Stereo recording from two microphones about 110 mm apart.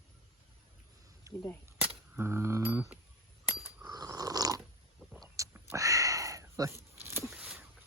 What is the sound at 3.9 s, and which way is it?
Dog, 35° right (ahead or behind).